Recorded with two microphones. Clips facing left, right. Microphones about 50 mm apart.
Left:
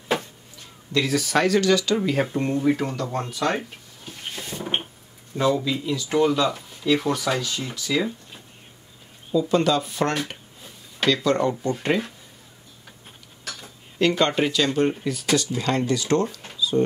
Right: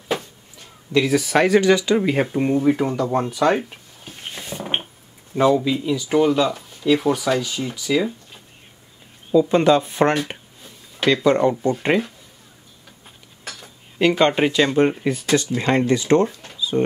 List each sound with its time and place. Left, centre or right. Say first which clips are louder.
0.9 s speech: right 4 dB; centre
4.4 s a sound: right 2 dB; right
5.3 s speech: right 5 dB; right
9.3 s speech: right 5 dB; right
13.9 s speech: right 4 dB; centre
16.5 s a sound: even; right